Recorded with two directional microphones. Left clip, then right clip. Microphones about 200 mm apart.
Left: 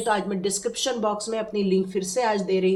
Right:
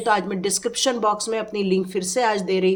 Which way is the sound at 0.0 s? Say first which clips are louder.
Right 3 dB; 40° right (ahead or behind).